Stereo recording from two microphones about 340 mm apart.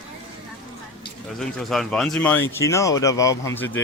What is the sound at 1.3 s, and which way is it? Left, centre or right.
Speech, centre.